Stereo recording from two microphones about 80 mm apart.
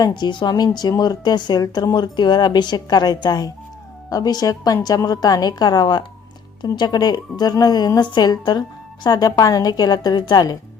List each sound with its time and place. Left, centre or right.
0.0 s a woman's voice: left